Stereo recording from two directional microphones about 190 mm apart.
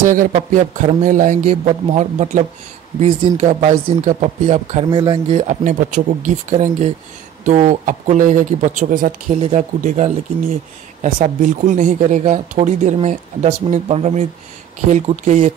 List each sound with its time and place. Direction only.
0.0 s speech: 45° right (ahead or behind)
9.4 s speech: 35° right (ahead or behind)